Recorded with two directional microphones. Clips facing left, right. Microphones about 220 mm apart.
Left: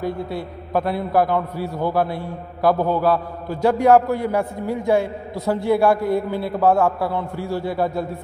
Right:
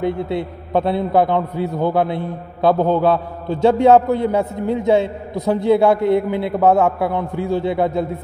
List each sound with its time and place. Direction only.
0.0 s a man's voice: 25° right (ahead or behind)